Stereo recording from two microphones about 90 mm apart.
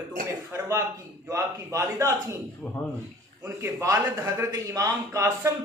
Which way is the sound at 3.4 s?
35° right (ahead or behind).